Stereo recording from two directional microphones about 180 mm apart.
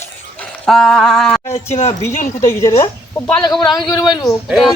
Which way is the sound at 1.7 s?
35° left (ahead or behind).